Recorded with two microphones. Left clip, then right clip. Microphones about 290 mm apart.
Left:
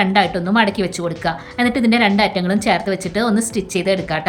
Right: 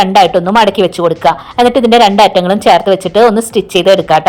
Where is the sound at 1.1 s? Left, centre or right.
Centre.